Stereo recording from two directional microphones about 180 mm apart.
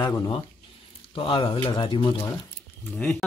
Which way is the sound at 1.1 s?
30° left (ahead or behind).